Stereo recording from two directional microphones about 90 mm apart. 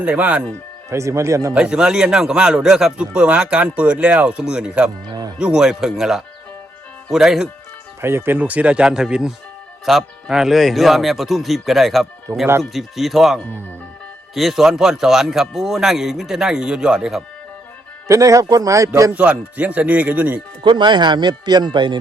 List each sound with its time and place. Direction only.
0.0 s speech: 15° right (ahead or behind)
0.9 s speech: 35° right (ahead or behind)
1.5 s speech: 10° right (ahead or behind)
5.0 s music: 50° right (ahead or behind)
5.4 s a man's voice: 10° right (ahead or behind)
8.0 s a man's voice: 25° right (ahead or behind); by 12.0 s centre (ahead or behind)
12.3 s speech: 35° right (ahead or behind)
12.7 s a man's voice: centre (ahead or behind)
18.1 s speech: 35° right (ahead or behind)
19.1 s speech: 15° right (ahead or behind)
20.7 s speech: 60° right (ahead or behind)